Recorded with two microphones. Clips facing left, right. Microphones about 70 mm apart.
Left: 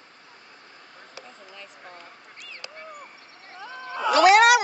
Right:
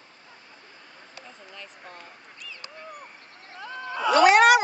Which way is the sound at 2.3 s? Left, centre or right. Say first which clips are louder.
Right 1 dB; left.